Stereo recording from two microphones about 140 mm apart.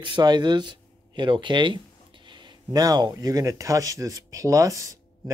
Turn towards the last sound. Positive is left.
turn(degrees=-25)  # may be behind; listen again after turning